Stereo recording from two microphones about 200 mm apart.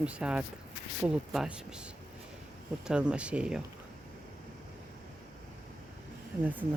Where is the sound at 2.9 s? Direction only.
5° right (ahead or behind).